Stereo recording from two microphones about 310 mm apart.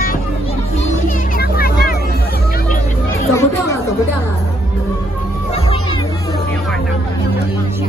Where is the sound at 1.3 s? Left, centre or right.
Left.